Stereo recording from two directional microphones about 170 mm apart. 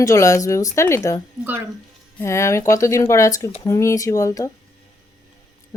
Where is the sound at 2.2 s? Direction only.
15° left (ahead or behind).